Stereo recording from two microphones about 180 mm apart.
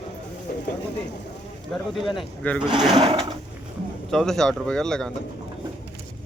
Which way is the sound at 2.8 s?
35° right (ahead or behind).